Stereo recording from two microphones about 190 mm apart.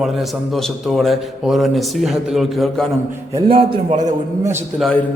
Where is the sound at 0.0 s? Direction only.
Centre (ahead or behind).